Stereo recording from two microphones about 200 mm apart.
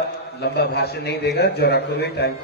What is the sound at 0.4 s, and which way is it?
A man's voice, 55° left (ahead or behind).